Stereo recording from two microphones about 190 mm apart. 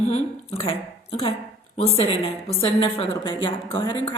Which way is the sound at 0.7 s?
30° left (ahead or behind).